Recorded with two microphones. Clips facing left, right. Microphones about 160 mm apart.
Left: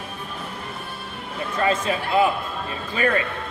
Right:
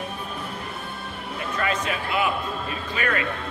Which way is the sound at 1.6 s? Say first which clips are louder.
Left 5 dB; 30° left (ahead or behind).